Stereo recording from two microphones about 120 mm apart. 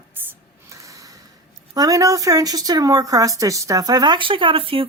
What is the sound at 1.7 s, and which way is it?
Speech, 30° right (ahead or behind).